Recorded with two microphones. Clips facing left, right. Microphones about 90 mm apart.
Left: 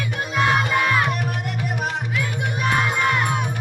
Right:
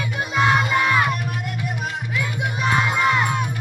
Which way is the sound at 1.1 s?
45° left (ahead or behind).